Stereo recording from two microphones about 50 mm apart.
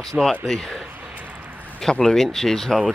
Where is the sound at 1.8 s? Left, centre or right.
Centre.